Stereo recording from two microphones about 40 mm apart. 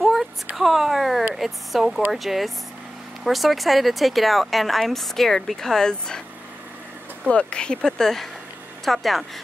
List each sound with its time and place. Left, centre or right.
0.0 s a sound: centre
1.3 s speech: centre
7.2 s speech: left; by 9.2 s centre